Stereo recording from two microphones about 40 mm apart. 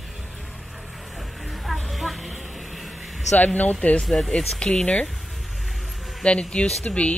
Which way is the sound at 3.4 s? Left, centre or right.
Left.